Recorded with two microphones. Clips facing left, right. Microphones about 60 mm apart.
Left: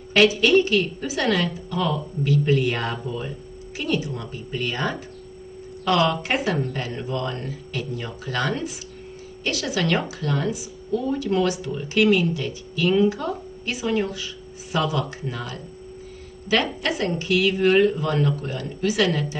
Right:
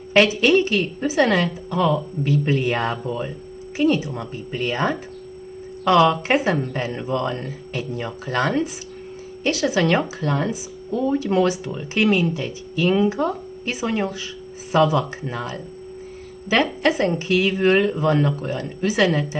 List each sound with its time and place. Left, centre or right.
0.1 s speech: right